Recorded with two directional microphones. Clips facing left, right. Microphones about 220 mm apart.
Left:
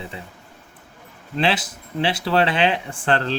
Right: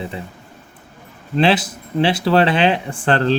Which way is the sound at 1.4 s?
30° right (ahead or behind).